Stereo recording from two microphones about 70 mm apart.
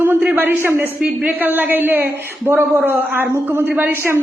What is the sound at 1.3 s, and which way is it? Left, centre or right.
A man's voice, right.